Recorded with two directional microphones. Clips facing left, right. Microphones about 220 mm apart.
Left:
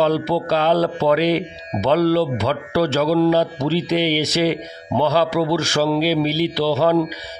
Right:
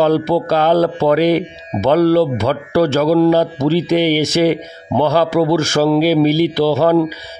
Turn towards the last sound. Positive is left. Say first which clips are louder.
# right 4 dB
turn(degrees=-50)  # may be behind; listen again after turning